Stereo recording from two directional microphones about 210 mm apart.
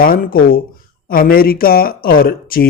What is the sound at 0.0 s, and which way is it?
Speech, 45° left (ahead or behind).